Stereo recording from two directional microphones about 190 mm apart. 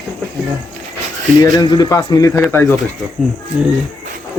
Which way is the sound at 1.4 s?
20° left (ahead or behind).